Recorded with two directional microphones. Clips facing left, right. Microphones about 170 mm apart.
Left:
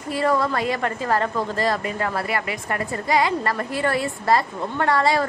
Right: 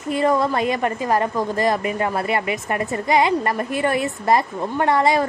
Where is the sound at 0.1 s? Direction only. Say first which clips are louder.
Right 3 dB; 20° right (ahead or behind).